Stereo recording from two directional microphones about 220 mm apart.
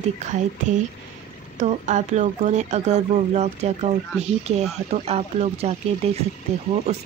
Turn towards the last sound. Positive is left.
turn(degrees=-30)  # may be behind; listen again after turning